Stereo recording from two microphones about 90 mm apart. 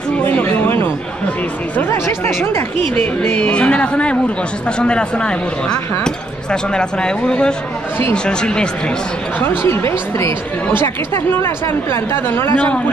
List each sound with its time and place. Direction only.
0.2 s chatter: 20° left (ahead or behind)
1.9 s speech: 30° left (ahead or behind)
3.3 s speech: 15° left (ahead or behind)
9.5 s speech: 25° left (ahead or behind)
11.4 s speech: 30° left (ahead or behind)